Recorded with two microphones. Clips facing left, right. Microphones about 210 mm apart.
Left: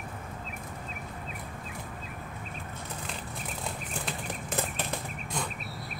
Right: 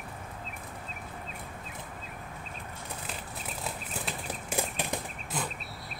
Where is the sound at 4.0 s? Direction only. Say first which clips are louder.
Left 1 dB; centre (ahead or behind).